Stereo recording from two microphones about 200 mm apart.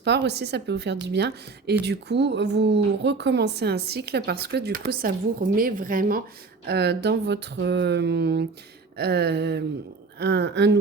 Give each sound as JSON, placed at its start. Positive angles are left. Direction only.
{"t": 0.0, "sound": "a woman's voice", "side_deg": -60}